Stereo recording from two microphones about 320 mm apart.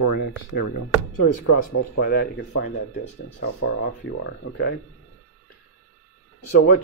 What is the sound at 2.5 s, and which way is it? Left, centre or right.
Speech, left.